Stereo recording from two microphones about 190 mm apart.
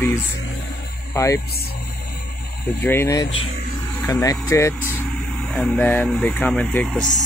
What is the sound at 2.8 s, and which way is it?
Speech, 10° left (ahead or behind).